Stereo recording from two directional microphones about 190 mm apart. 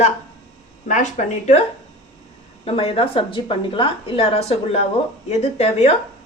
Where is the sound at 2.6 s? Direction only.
30° left (ahead or behind).